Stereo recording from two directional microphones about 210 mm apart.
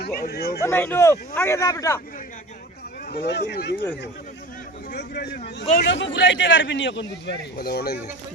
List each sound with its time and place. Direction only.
0.0 s speech: 50° left (ahead or behind)
0.6 s speech: 10° left (ahead or behind)
3.1 s a man's voice: 55° left (ahead or behind)
4.9 s a man's voice: 50° left (ahead or behind)